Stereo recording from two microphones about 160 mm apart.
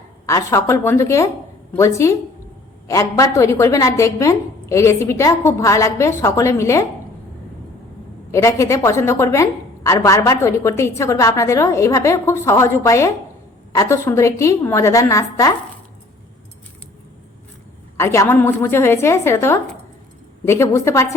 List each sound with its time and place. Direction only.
0.3 s a woman's voice: 20° left (ahead or behind)
8.3 s a woman's voice: 20° left (ahead or behind)
17.9 s a woman's voice: 20° left (ahead or behind)